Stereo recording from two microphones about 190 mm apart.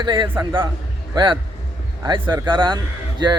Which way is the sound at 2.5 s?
25° right (ahead or behind).